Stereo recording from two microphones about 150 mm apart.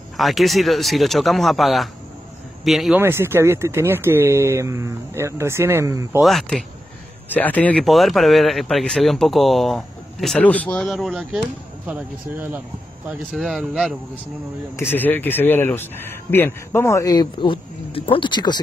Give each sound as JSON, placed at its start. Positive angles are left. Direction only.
{"t": 0.2, "sound": "speech", "side_deg": 0}
{"t": 3.0, "sound": "speech", "side_deg": -15}
{"t": 6.2, "sound": "speech", "side_deg": 0}
{"t": 7.2, "sound": "speech", "side_deg": 10}
{"t": 14.8, "sound": "speech", "side_deg": 15}